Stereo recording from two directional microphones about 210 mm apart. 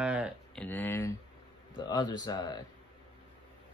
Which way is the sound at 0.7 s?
10° left (ahead or behind).